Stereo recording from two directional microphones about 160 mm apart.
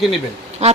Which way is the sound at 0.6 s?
45° right (ahead or behind).